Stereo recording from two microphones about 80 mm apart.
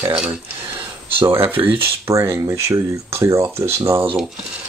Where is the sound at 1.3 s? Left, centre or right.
Right.